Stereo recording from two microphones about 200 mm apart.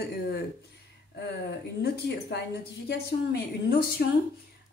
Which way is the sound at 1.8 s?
55° left (ahead or behind).